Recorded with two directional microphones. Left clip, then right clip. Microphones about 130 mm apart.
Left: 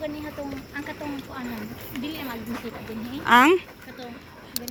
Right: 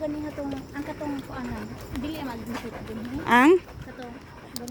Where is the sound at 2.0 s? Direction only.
45° right (ahead or behind).